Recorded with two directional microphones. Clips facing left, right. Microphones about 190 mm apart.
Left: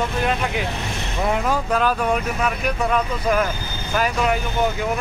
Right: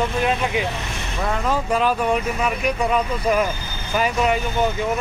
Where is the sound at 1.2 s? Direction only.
15° left (ahead or behind).